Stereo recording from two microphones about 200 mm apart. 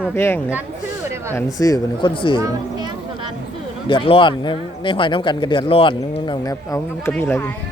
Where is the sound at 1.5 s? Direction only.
15° left (ahead or behind).